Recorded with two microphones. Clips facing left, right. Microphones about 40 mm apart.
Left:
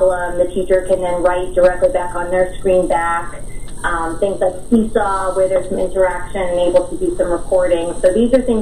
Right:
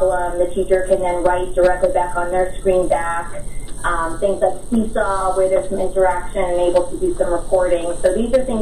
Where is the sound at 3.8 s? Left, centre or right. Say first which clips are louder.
Left 1 dB; centre.